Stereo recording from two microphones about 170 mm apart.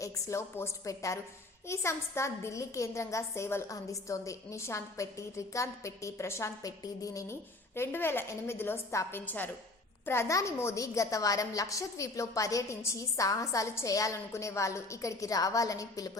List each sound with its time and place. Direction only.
0.0 s a woman's voice: 15° left (ahead or behind)